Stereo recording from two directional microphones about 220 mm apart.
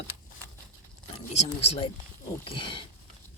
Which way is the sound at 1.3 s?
30° left (ahead or behind).